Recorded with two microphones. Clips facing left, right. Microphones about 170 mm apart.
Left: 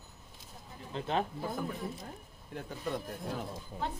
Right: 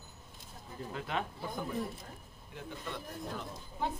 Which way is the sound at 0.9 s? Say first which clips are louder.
Left 4 dB; 30° left (ahead or behind).